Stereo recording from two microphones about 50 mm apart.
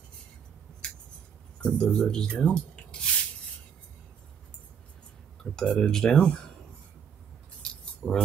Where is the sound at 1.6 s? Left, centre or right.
Centre.